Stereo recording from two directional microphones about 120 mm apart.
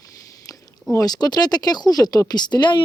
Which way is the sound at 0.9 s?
35° left (ahead or behind).